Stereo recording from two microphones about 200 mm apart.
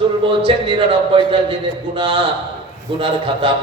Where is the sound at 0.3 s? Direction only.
25° right (ahead or behind).